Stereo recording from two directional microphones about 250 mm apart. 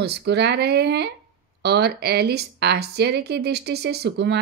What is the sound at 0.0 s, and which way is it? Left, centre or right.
Speech, right.